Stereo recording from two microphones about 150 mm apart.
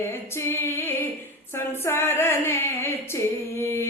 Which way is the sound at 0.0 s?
15° left (ahead or behind).